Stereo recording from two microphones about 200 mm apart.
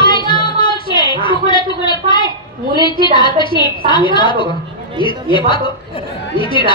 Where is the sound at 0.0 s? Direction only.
25° left (ahead or behind).